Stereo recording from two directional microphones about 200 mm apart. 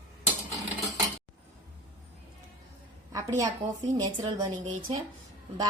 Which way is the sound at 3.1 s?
15° right (ahead or behind).